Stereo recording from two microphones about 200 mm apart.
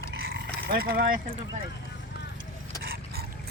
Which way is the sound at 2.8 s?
50° right (ahead or behind).